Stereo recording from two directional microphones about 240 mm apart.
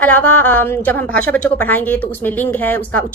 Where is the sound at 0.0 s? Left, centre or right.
Centre.